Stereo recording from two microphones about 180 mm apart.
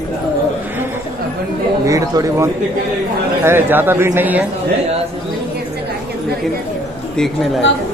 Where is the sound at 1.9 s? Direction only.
20° right (ahead or behind).